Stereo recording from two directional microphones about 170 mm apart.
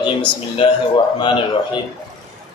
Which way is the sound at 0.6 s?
30° left (ahead or behind).